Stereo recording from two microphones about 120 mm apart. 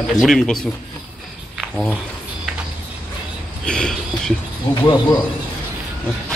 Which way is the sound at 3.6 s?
5° left (ahead or behind).